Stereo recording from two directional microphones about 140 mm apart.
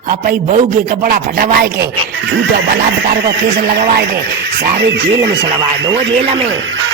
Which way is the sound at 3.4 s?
90° right.